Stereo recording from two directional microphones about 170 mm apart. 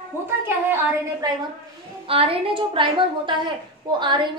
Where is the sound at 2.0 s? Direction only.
35° right (ahead or behind).